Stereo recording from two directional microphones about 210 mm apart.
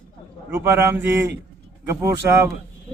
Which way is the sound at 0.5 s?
10° right (ahead or behind).